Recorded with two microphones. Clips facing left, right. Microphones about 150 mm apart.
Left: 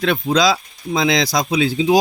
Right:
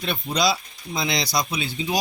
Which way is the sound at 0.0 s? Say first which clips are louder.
Left 7 dB; 90° left.